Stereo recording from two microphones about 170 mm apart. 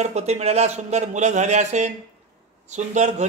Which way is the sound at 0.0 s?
40° right (ahead or behind).